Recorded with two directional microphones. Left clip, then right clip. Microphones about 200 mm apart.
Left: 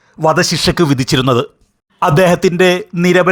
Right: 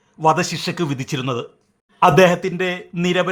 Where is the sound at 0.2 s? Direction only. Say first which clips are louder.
Left 5 dB; 25° left (ahead or behind).